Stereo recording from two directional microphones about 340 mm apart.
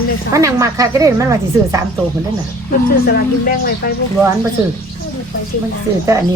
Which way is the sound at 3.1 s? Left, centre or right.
Left.